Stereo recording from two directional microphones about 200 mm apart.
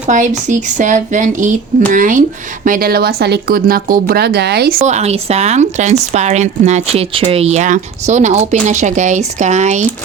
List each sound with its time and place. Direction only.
0.1 s a woman's voice: 40° right (ahead or behind)
4.9 s speech: 35° right (ahead or behind)